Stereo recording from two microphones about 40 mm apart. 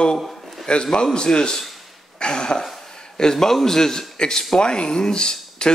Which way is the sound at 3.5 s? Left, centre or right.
Centre.